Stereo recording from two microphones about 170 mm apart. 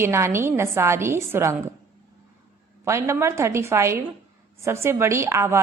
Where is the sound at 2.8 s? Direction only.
15° right (ahead or behind).